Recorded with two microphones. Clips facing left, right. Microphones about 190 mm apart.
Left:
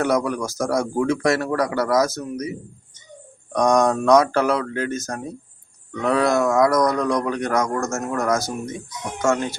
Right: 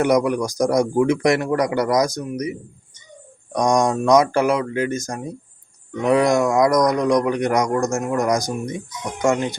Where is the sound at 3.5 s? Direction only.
10° right (ahead or behind).